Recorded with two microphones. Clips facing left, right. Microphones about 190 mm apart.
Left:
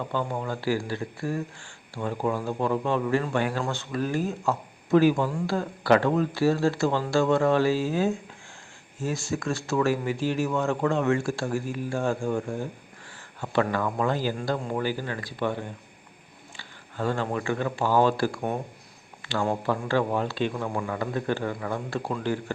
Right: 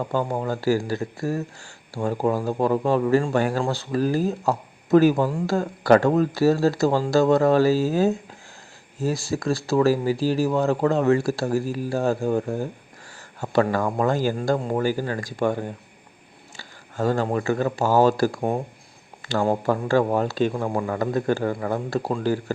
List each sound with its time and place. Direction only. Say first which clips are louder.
0.1 s a man's voice: right 4 dB; 40° right (ahead or behind)
16.6 s a man's voice: right 5 dB; 40° right (ahead or behind)